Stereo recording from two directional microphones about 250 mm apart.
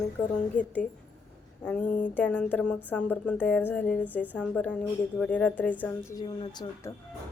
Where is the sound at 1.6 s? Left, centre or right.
Centre.